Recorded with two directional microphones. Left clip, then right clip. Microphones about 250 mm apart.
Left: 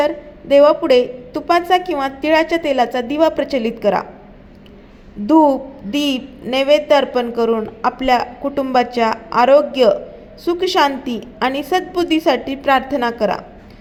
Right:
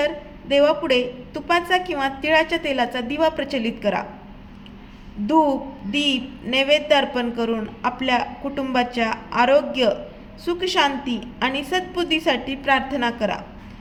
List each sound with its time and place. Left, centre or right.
0.0 s a woman's voice: centre
5.2 s a woman's voice: centre